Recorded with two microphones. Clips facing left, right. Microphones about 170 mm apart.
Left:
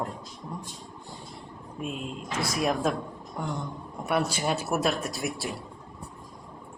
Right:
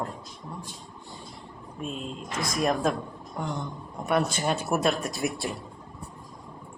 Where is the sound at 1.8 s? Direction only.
5° left (ahead or behind).